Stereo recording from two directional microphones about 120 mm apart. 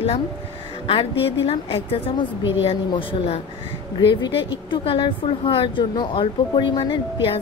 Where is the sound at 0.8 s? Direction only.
50° left (ahead or behind).